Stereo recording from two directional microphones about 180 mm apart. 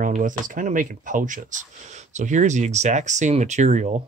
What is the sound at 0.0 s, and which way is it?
Speech, 45° right (ahead or behind).